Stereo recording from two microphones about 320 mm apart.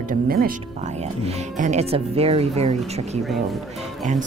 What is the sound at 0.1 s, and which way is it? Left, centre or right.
Speech, right.